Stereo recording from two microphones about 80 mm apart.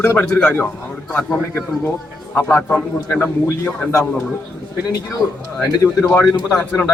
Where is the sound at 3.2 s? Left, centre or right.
Left.